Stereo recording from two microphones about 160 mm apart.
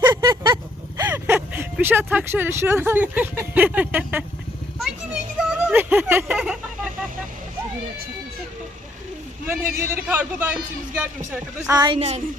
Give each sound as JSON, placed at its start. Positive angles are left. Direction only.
{"t": 0.0, "sound": "a sound", "side_deg": -30}
{"t": 1.1, "sound": "speech", "side_deg": -15}
{"t": 5.4, "sound": "speech", "side_deg": -10}
{"t": 9.5, "sound": "a man's voice", "side_deg": -15}
{"t": 11.7, "sound": "a woman's voice", "side_deg": -25}
{"t": 11.9, "sound": "a sound", "side_deg": -40}